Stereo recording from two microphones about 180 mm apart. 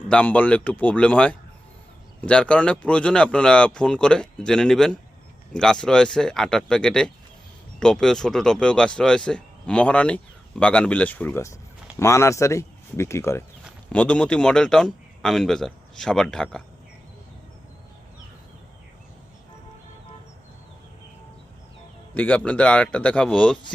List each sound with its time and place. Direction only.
0.1 s speech: 10° left (ahead or behind)
22.1 s speech: 10° left (ahead or behind)